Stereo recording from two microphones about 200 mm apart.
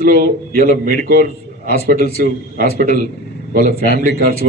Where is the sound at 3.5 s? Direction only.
45° right (ahead or behind).